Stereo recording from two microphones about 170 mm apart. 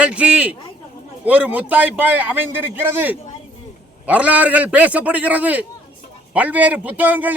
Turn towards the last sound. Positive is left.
turn(degrees=-10)  # may be behind; listen again after turning